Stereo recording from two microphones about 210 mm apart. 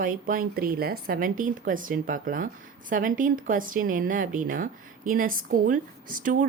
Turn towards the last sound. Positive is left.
turn(degrees=-40)  # may be behind; listen again after turning